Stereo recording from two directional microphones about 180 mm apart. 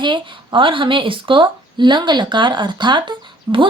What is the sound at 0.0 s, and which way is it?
Speech, 25° right (ahead or behind).